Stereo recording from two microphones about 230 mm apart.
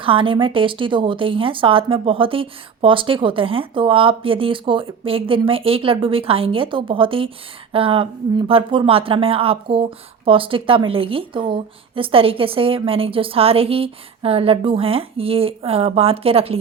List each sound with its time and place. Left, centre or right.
0.0 s speech: right